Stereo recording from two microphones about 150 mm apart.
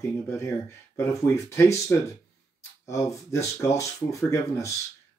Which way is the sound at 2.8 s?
20° left (ahead or behind).